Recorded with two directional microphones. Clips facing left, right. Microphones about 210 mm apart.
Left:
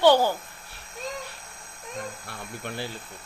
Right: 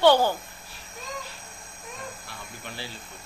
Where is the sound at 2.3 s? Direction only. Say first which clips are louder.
Left 5 dB; 55° left (ahead or behind).